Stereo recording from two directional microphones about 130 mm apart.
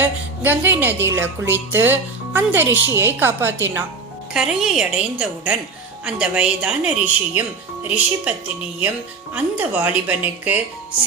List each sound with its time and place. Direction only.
0.0 s a woman's voice: 15° right (ahead or behind)
4.4 s a woman's voice: 5° right (ahead or behind)